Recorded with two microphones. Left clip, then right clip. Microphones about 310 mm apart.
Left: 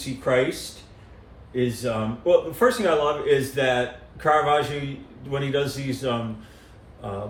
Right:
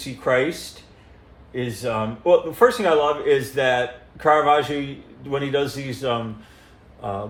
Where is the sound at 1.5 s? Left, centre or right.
Right.